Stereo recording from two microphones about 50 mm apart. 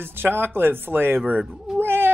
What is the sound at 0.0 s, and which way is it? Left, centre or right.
Speech, right.